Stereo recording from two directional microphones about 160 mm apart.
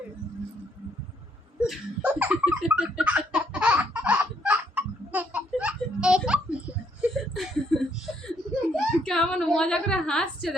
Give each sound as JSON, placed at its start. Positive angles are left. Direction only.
{"t": 1.5, "sound": "laughter", "side_deg": -5}
{"t": 8.7, "sound": "whimper", "side_deg": 5}